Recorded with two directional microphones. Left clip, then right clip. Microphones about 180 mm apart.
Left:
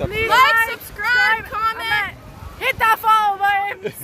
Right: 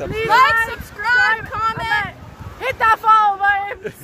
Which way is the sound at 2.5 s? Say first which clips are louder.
Right 1 dB; 10° right (ahead or behind).